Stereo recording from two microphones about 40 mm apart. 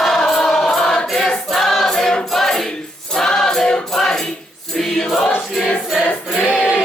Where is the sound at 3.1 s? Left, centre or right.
Centre.